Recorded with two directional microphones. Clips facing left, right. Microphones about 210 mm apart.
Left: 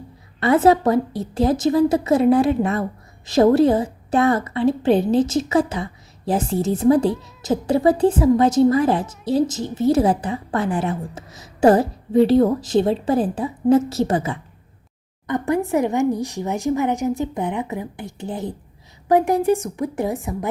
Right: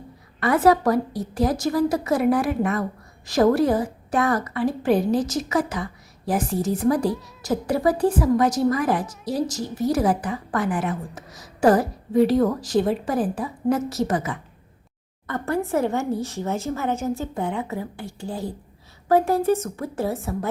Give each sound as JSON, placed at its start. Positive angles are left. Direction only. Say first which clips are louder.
{"t": 0.3, "sound": "a woman's voice", "louder": "left 3 dB", "side_deg": 25}
{"t": 15.3, "sound": "a woman's voice", "louder": "left 4 dB", "side_deg": 15}